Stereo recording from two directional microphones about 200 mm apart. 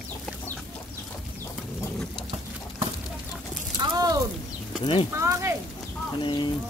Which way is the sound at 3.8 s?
20° right (ahead or behind).